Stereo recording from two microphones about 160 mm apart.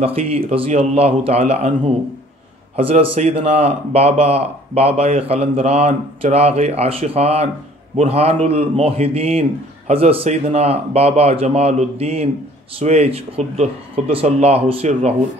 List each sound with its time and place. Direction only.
0.0 s a man's voice: 40° right (ahead or behind)